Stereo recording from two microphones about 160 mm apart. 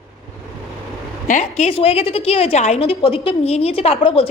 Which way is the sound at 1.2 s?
50° left (ahead or behind).